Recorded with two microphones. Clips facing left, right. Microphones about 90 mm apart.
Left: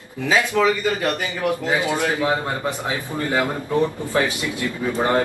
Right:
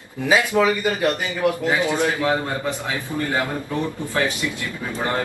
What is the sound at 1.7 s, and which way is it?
Speech, 20° left (ahead or behind).